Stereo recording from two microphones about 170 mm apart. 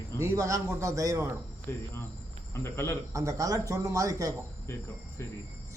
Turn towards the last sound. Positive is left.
turn(degrees=-20)  # may be behind; listen again after turning